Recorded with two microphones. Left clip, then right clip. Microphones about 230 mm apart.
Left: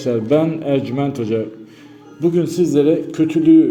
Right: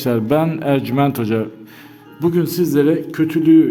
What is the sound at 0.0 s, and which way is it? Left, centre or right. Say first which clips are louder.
A man's voice: left 1 dB; right.